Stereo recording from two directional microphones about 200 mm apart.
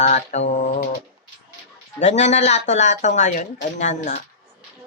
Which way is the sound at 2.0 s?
35° left (ahead or behind).